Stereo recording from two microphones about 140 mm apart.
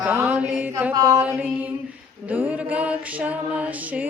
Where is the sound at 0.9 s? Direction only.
25° right (ahead or behind).